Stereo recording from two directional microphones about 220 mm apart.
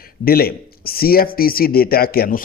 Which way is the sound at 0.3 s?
45° left (ahead or behind).